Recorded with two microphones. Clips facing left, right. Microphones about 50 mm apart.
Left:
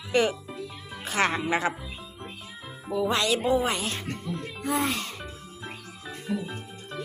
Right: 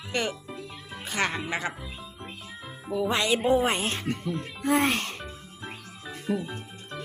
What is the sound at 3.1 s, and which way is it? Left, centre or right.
Speech, right.